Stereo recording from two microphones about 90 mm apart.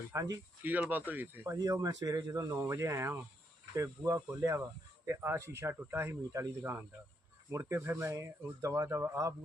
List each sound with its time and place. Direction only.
0.1 s speech: 35° right (ahead or behind)
0.6 s speech: 20° right (ahead or behind)
1.5 s speech: 45° right (ahead or behind)